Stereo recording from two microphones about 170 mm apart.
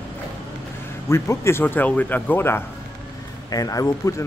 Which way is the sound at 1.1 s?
15° left (ahead or behind).